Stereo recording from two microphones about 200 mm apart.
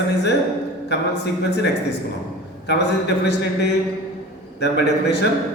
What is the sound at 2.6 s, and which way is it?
A woman's voice, 55° left (ahead or behind).